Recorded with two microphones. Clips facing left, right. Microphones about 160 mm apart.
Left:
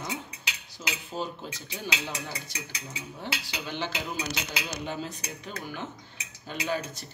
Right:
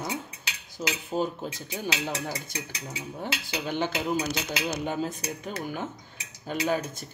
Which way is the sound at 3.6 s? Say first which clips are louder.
Right 6 dB; 50° right (ahead or behind).